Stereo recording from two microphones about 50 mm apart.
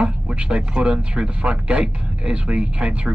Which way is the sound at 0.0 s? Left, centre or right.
Centre.